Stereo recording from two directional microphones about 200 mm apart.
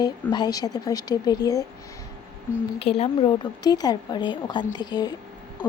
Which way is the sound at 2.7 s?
30° left (ahead or behind).